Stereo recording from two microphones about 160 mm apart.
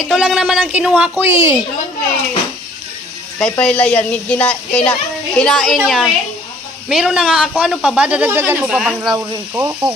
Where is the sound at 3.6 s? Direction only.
10° left (ahead or behind); by 8.7 s 15° right (ahead or behind).